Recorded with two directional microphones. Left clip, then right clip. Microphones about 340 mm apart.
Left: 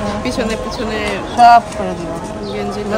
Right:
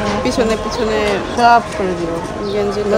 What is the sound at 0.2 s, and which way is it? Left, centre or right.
Speech, centre.